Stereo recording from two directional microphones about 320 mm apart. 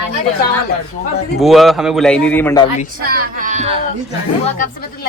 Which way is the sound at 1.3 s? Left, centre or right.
Centre.